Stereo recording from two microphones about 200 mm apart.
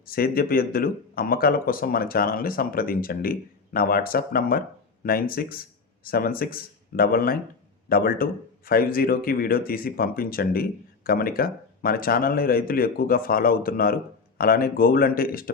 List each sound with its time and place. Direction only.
0.1 s speech: 45° left (ahead or behind)